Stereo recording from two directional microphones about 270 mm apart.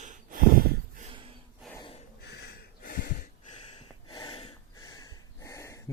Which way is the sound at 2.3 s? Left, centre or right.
Left.